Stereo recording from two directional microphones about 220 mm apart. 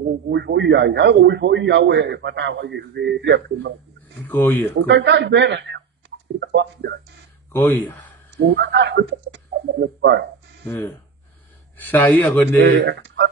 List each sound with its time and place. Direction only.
0.3 s a man's voice: 50° right (ahead or behind)
4.3 s a man's voice: 10° left (ahead or behind)
4.8 s speech: 55° right (ahead or behind)
7.5 s a man's voice: 10° left (ahead or behind)
8.4 s a man's voice: 50° right (ahead or behind)
10.7 s a man's voice: 10° left (ahead or behind)
12.8 s a man's voice: 50° right (ahead or behind)